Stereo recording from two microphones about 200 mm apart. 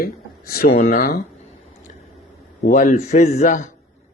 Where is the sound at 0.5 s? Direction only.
50° left (ahead or behind).